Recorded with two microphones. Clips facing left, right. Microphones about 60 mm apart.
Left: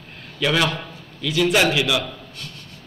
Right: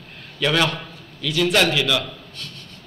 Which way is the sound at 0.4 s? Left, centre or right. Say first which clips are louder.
Even; centre.